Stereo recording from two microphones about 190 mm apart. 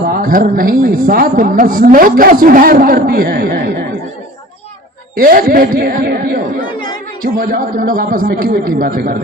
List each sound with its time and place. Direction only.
0.1 s a woman's voice: 50° right (ahead or behind)
5.1 s a woman's voice: 50° right (ahead or behind)